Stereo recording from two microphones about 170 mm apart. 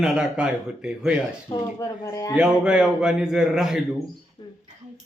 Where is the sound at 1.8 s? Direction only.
20° left (ahead or behind).